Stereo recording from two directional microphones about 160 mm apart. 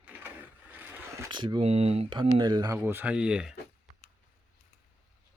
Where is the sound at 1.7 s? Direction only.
40° right (ahead or behind).